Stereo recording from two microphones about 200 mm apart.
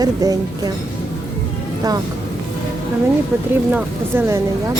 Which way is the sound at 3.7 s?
15° right (ahead or behind).